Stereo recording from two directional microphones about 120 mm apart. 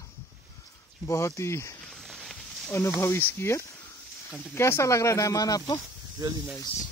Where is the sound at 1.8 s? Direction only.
5° left (ahead or behind).